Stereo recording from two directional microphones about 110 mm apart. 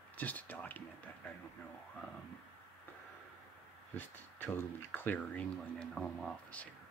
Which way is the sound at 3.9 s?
20° left (ahead or behind).